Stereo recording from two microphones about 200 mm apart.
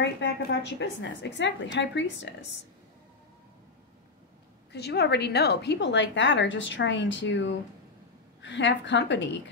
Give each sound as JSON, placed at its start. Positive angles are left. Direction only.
{"t": 0.0, "sound": "a woman's voice", "side_deg": 60}
{"t": 4.7, "sound": "a woman's voice", "side_deg": 55}